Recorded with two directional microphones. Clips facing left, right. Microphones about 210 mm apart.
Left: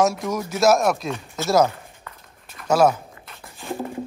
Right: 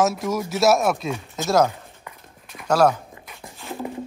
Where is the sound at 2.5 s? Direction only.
5° left (ahead or behind).